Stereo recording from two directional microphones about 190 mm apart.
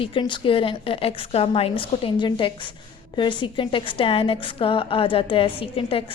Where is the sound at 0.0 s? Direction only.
25° left (ahead or behind).